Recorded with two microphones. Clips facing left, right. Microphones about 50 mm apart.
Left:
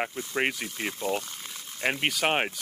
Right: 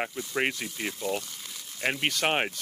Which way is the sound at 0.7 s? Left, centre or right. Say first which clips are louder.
Left 1 dB; left.